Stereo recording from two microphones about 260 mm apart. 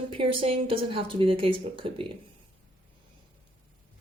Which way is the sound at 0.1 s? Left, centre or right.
Centre.